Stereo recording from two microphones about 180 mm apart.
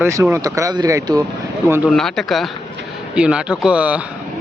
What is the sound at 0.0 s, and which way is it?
A man's voice, 15° right (ahead or behind).